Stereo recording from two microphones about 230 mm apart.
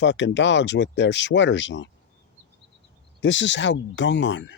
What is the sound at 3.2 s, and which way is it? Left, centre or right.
Speech, left.